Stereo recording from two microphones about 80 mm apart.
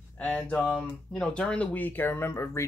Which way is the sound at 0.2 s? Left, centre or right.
Centre.